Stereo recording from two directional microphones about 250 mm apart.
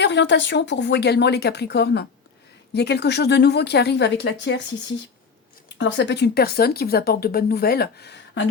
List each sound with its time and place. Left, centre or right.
0.0 s speech: left
5.7 s speech: left